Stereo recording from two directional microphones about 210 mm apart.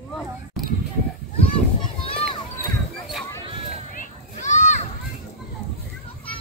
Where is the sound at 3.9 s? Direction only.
35° left (ahead or behind).